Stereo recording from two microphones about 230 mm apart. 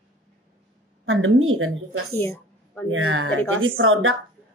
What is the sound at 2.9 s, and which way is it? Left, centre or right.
A woman's voice, right.